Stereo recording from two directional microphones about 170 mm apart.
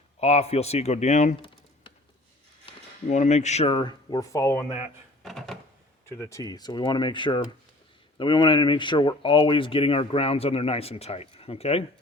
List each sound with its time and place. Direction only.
0.2 s speech: 40° left (ahead or behind)
3.1 s speech: 45° left (ahead or behind); by 4.6 s 15° left (ahead or behind)
5.2 s a sound: centre (ahead or behind)
6.1 s speech: 15° left (ahead or behind); by 11.9 s 35° left (ahead or behind)